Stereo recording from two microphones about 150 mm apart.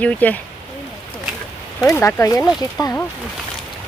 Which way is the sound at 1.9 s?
20° left (ahead or behind).